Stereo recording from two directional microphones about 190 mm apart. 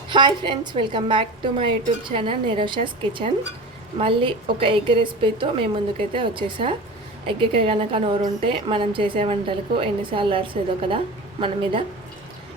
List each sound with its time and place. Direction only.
0.1 s a woman's voice: 25° right (ahead or behind)